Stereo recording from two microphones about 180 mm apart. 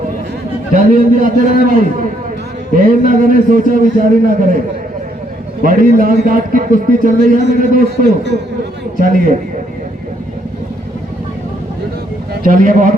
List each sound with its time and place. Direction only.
0.7 s a man's voice: 45° right (ahead or behind)
5.6 s a man's voice: 50° right (ahead or behind)
9.0 s a man's voice: 50° right (ahead or behind)
12.3 s a man's voice: 50° right (ahead or behind)